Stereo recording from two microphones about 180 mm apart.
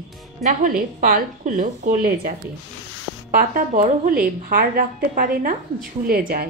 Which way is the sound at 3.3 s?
50° right (ahead or behind).